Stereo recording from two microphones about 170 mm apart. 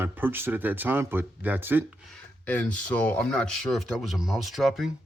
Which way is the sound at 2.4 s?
10° left (ahead or behind).